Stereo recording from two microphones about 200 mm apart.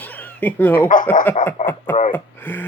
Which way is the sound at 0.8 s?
40° left (ahead or behind).